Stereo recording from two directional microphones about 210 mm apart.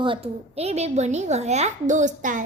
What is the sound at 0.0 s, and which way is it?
A woman's voice, 25° right (ahead or behind).